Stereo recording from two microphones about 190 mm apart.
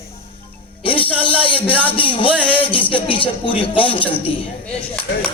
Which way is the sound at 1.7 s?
10° left (ahead or behind).